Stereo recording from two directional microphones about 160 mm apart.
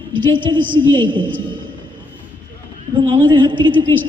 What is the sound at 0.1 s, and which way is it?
A woman's voice, 30° right (ahead or behind).